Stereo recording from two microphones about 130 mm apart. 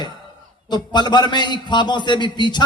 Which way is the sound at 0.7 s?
35° left (ahead or behind).